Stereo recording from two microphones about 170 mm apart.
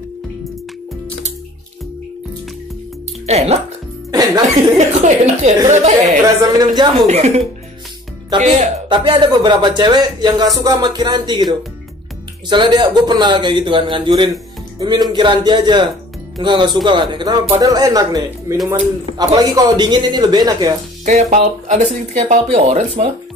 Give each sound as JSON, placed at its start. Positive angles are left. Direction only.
{"t": 3.3, "sound": "speech", "side_deg": -40}
{"t": 4.1, "sound": "music", "side_deg": -20}
{"t": 4.7, "sound": "speech", "side_deg": -40}
{"t": 6.2, "sound": "a man's voice", "side_deg": -25}
{"t": 7.1, "sound": "speech", "side_deg": -40}
{"t": 8.8, "sound": "a man's voice", "side_deg": -30}
{"t": 12.4, "sound": "a man's voice", "side_deg": -25}
{"t": 21.0, "sound": "speech", "side_deg": -40}